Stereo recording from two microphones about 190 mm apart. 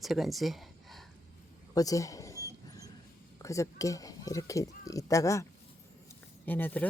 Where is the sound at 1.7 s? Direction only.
20° left (ahead or behind).